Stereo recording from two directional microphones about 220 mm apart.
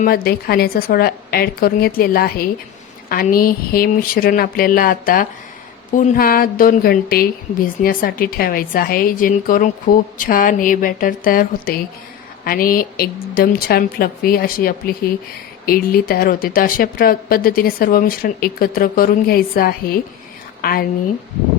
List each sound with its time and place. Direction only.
0.0 s a woman's voice: 45° left (ahead or behind)